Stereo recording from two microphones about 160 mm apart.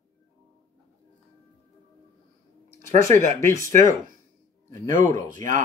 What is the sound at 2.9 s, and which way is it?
Speech, 55° right (ahead or behind).